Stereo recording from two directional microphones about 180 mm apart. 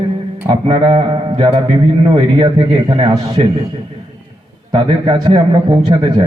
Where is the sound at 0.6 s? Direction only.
25° right (ahead or behind).